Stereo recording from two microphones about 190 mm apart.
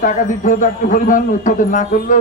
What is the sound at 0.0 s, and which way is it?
A man's voice, 45° left (ahead or behind).